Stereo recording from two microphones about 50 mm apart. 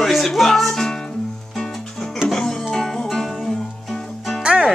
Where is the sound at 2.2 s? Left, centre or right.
Centre.